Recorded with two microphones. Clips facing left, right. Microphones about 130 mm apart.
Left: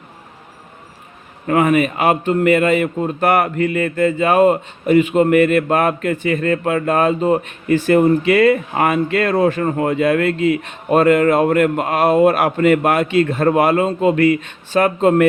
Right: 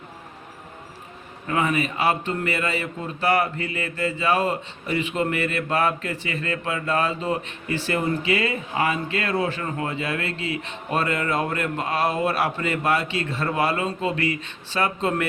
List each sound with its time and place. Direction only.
1.5 s speech: 50° left (ahead or behind)
8.2 s speech: 60° left (ahead or behind)